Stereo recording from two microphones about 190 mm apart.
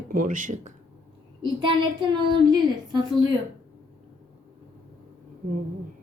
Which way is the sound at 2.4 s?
20° right (ahead or behind).